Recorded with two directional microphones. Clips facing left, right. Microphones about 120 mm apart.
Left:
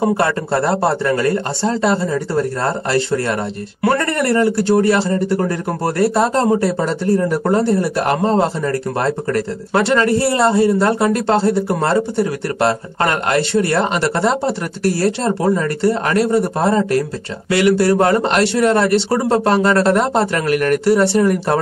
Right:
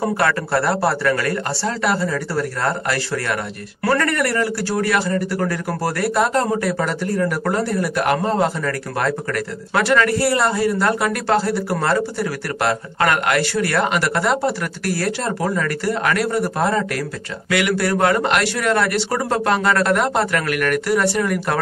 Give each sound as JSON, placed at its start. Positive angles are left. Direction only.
{"t": 0.0, "sound": "a man's voice", "side_deg": 25}